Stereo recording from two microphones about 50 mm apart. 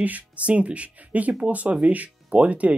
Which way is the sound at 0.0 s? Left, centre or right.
Right.